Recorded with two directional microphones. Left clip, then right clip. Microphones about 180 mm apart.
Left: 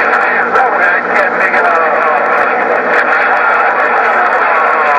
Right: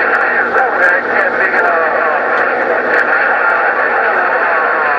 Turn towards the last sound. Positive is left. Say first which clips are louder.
# left 3 dB
turn(degrees=40)  # may be behind; listen again after turning